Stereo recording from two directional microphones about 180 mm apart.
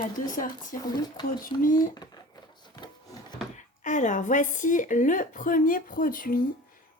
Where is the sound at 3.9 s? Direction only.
45° left (ahead or behind).